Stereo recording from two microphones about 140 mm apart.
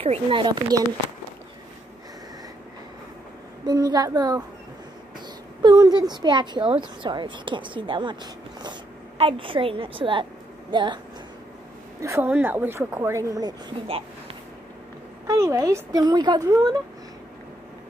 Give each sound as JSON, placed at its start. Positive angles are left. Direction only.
{"t": 0.0, "sound": "a woman's voice", "side_deg": -40}
{"t": 3.6, "sound": "a woman's voice", "side_deg": -30}
{"t": 5.6, "sound": "a woman's voice", "side_deg": -30}
{"t": 12.0, "sound": "a woman's voice", "side_deg": -20}
{"t": 13.8, "sound": "a sound", "side_deg": -40}
{"t": 15.2, "sound": "a woman's voice", "side_deg": -25}